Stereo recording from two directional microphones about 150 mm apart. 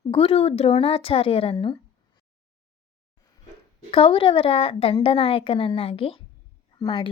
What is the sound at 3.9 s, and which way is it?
A woman's voice, 35° left (ahead or behind).